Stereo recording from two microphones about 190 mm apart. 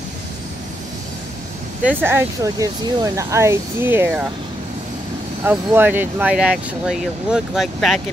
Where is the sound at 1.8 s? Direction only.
10° right (ahead or behind).